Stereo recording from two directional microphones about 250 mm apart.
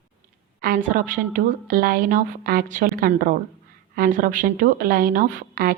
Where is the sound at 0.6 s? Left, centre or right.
Right.